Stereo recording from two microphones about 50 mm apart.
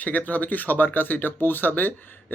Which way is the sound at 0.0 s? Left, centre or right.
Left.